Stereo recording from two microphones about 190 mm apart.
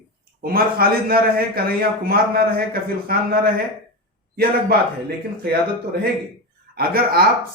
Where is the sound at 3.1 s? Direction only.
55° right (ahead or behind).